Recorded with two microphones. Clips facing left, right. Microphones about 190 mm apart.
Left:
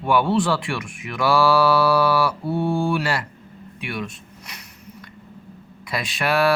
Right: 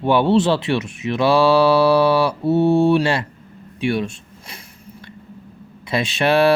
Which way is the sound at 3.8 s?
25° right (ahead or behind).